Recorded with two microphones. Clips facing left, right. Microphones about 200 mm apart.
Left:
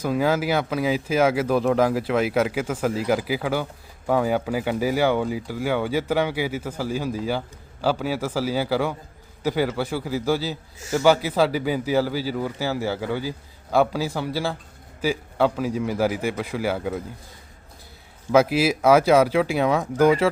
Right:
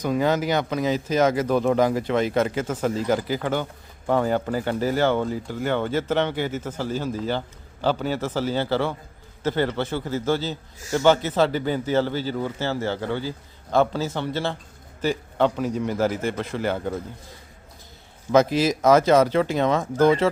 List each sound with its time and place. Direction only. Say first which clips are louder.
0.0 s speech: even; 5° left (ahead or behind)
18.3 s speech: even; 10° left (ahead or behind)